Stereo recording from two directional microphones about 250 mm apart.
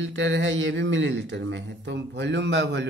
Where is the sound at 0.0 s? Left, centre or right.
Right.